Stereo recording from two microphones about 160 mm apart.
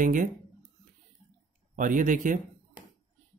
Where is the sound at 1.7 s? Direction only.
55° right (ahead or behind).